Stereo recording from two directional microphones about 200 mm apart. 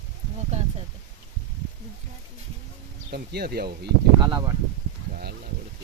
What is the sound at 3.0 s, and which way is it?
Speech, 50° right (ahead or behind).